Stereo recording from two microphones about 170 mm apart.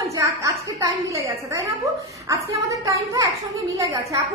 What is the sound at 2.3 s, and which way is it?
A woman's voice, 20° right (ahead or behind).